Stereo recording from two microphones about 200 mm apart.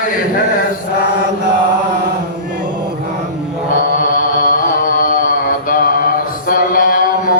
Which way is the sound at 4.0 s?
45° left (ahead or behind).